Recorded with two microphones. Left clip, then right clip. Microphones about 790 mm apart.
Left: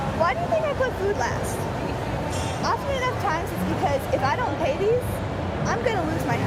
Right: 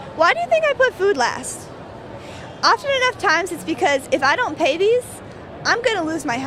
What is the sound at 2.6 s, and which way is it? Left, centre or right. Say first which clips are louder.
A woman's voice: right 10 dB; right.